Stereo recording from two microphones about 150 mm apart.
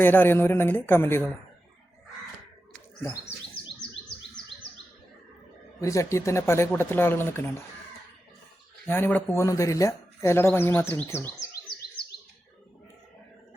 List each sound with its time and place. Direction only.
0.0 s speech: 15° left (ahead or behind)
5.8 s speech: 20° left (ahead or behind)
8.9 s speech: 10° left (ahead or behind)